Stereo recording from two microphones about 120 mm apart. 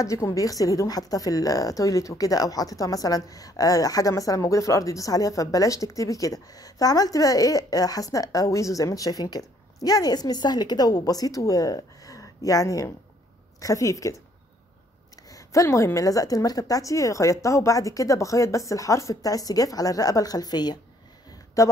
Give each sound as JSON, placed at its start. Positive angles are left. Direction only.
{"t": 0.0, "sound": "a woman's voice", "side_deg": 25}
{"t": 15.2, "sound": "a woman's voice", "side_deg": 30}